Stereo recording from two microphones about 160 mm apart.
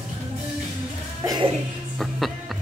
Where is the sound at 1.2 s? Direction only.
25° right (ahead or behind).